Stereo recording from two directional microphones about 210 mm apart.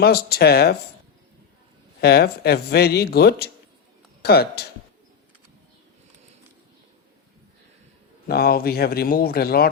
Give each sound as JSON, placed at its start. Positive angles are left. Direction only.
{"t": 0.0, "sound": "a man's voice", "side_deg": 50}
{"t": 2.0, "sound": "a man's voice", "side_deg": 50}
{"t": 8.3, "sound": "a man's voice", "side_deg": 45}